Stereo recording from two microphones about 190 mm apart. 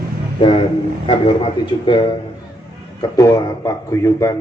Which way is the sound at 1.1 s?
25° left (ahead or behind).